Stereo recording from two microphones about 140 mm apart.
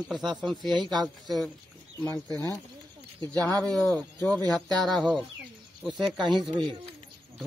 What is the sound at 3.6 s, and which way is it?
Speech, 5° left (ahead or behind).